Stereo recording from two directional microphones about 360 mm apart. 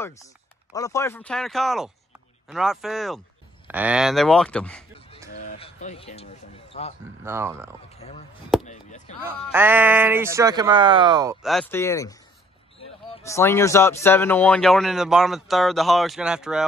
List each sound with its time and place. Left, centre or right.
0.7 s speech: centre
5.3 s speech: centre
7.2 s speech: centre
7.9 s speech: centre
9.5 s speech: centre
11.4 s speech: centre